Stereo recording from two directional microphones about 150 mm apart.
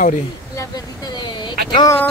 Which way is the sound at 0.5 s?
25° left (ahead or behind).